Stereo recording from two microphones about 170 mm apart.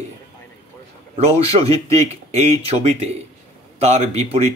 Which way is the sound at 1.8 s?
40° right (ahead or behind).